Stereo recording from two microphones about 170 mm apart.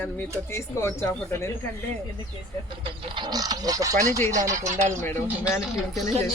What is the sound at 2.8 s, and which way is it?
Speech, 25° right (ahead or behind).